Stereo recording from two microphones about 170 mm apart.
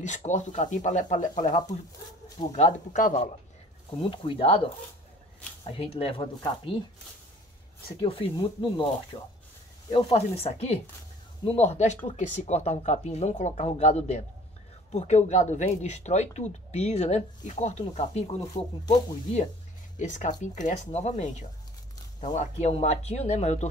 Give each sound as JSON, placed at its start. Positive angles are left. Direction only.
{"t": 0.0, "sound": "speech", "side_deg": 45}
{"t": 4.1, "sound": "speech", "side_deg": 30}
{"t": 8.0, "sound": "speech", "side_deg": 30}
{"t": 9.8, "sound": "speech", "side_deg": 30}
{"t": 20.0, "sound": "speech", "side_deg": 45}